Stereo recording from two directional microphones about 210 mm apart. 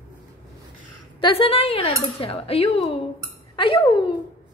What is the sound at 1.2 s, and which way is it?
Speech, 25° left (ahead or behind).